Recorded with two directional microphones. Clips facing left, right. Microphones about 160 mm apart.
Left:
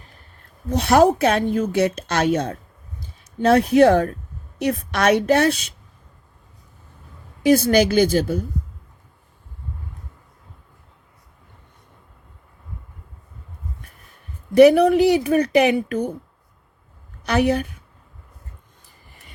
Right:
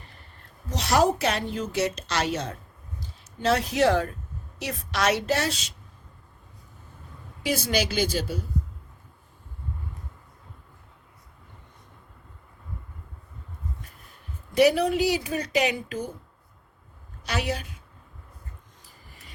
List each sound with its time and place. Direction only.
0.7 s a woman's voice: 55° left (ahead or behind)
7.4 s a woman's voice: 55° left (ahead or behind)
14.5 s speech: 55° left (ahead or behind)
17.2 s speech: 60° left (ahead or behind)